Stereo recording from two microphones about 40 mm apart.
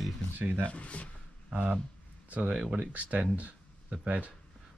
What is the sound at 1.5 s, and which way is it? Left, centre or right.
Speech, right.